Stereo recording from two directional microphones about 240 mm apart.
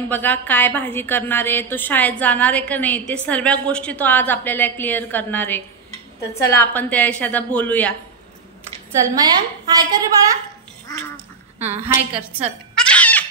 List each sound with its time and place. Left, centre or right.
0.1 s a woman's voice: centre
9.0 s a woman's voice: centre
10.9 s duck: centre
11.6 s a woman's voice: centre
12.7 s goat: centre